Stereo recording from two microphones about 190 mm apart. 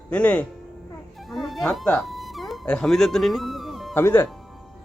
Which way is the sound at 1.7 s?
Centre (ahead or behind).